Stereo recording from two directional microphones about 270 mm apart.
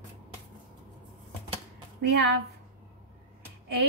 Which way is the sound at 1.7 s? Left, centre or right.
Right.